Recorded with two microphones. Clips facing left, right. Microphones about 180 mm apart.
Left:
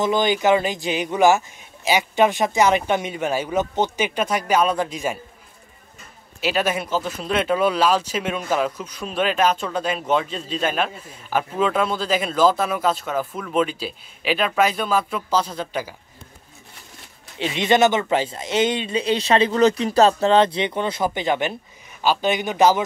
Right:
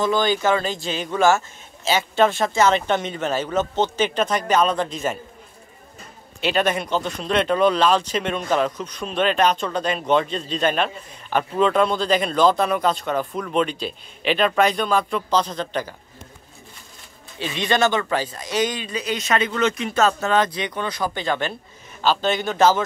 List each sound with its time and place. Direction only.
0.0 s speech: 20° left (ahead or behind)
6.4 s speech: 5° left (ahead or behind)
17.4 s speech: 20° left (ahead or behind)